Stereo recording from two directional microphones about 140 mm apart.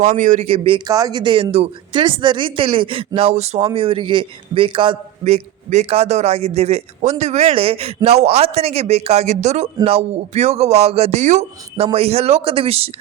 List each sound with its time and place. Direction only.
0.0 s a man's voice: 65° right (ahead or behind); by 0.8 s 45° right (ahead or behind)
0.9 s speech: 25° right (ahead or behind); by 1.7 s 45° right (ahead or behind)
1.9 s speech: 35° right (ahead or behind); by 3.7 s 50° right (ahead or behind)
3.8 s speech: 40° right (ahead or behind)
5.2 s a man's voice: 50° right (ahead or behind)